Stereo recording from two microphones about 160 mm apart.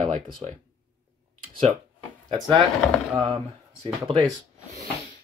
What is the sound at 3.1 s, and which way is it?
Speech, 35° right (ahead or behind).